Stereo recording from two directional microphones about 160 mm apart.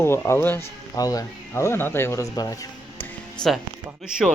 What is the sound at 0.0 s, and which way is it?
Speech, 15° left (ahead or behind).